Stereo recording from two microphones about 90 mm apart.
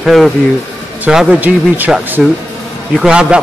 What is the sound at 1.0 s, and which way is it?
A man's voice, 10° right (ahead or behind).